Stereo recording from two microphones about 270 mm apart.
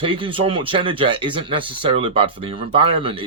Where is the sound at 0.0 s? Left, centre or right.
Centre.